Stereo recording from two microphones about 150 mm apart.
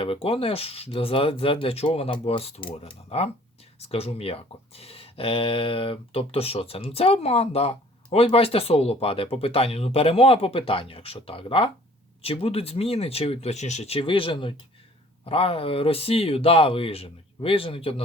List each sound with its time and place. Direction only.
0.0 s speech: 40° left (ahead or behind)